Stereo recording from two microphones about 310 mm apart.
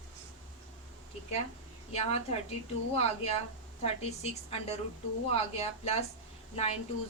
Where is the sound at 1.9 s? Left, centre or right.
Centre.